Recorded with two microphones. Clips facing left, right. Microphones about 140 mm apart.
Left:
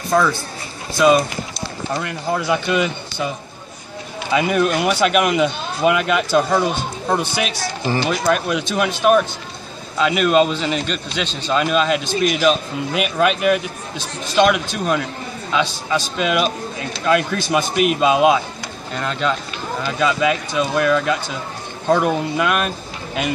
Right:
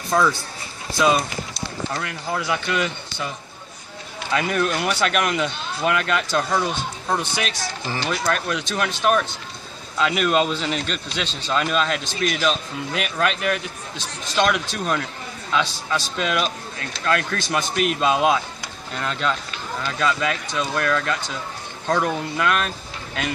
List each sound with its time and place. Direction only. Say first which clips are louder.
1.0 s run: left 6 dB; 5° left (ahead or behind)
2.2 s speech: left 5 dB; 20° left (ahead or behind)